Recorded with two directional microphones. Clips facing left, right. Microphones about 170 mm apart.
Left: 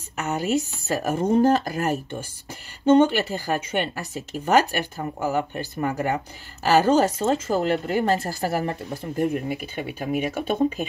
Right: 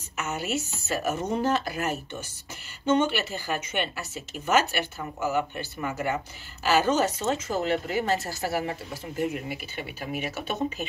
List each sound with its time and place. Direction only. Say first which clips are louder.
0.2 s a woman's voice: left 6 dB; 35° left (ahead or behind)
1.4 s speech: left 6 dB; 45° left (ahead or behind)
3.3 s speech: left 5 dB; 40° left (ahead or behind)